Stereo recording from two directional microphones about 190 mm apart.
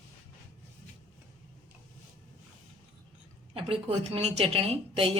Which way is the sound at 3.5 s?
30° right (ahead or behind).